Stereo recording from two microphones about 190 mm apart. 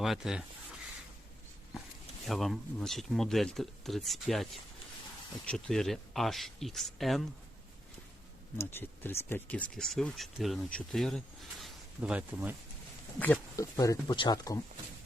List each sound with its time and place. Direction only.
0.0 s speech: centre (ahead or behind)
2.2 s speech: centre (ahead or behind)
8.5 s speech: 10° left (ahead or behind); by 12.5 s 10° right (ahead or behind)
13.1 s speech: 10° left (ahead or behind)